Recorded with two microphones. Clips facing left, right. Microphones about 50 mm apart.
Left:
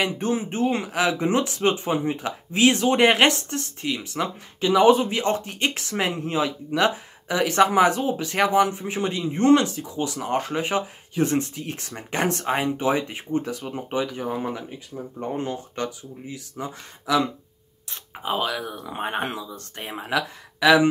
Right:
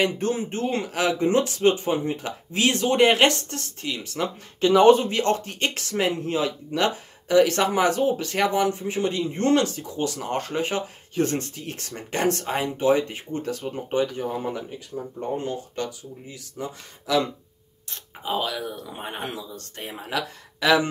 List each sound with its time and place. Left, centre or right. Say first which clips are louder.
0.0 s speech: right 1 dB; left